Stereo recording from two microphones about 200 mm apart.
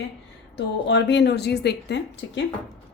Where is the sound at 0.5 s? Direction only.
60° left (ahead or behind).